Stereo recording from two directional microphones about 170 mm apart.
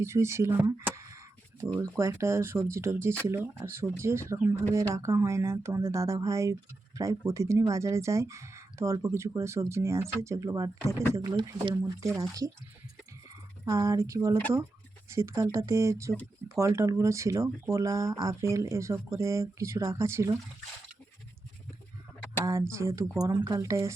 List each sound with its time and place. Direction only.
0.0 s speech: 15° right (ahead or behind)
13.7 s speech: 15° right (ahead or behind)
22.7 s speech: 15° right (ahead or behind)